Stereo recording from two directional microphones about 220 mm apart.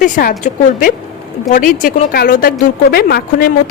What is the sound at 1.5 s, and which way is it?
A woman's voice, 35° left (ahead or behind).